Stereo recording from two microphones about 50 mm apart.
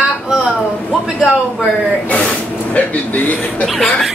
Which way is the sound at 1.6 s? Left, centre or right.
Left.